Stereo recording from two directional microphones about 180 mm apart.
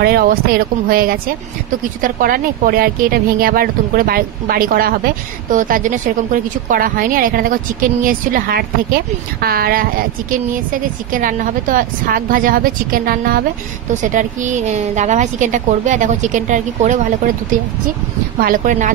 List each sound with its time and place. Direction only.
0.0 s a woman's voice: 55° right (ahead or behind)
18.4 s speech: 45° right (ahead or behind)